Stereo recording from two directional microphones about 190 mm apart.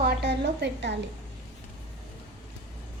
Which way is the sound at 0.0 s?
60° right (ahead or behind).